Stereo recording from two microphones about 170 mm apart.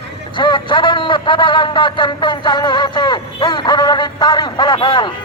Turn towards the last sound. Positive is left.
turn(degrees=25)  # may be behind; listen again after turning